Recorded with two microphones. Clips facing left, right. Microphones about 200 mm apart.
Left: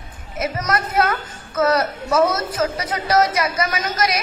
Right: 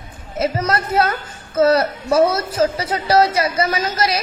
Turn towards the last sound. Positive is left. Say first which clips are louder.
# right 2 dB
turn(degrees=-30)  # may be behind; listen again after turning